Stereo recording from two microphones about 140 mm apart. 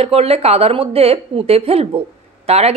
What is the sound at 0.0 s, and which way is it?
A woman's voice, 45° right (ahead or behind).